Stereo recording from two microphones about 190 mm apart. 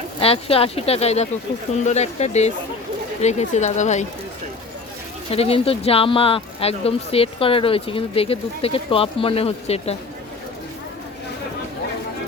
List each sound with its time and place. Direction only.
0.2 s speech: 30° left (ahead or behind)
5.3 s speech: 30° left (ahead or behind)